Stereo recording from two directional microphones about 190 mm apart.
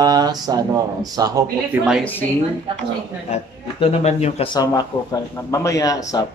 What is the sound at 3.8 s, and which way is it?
Speech, 35° left (ahead or behind).